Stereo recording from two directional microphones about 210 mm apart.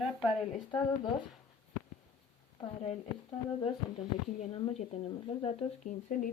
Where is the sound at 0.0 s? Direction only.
Centre (ahead or behind).